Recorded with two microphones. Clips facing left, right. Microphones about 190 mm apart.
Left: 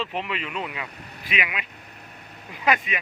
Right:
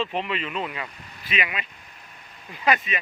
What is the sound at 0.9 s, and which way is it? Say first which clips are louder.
Vehicle: left 4 dB; 60° left (ahead or behind).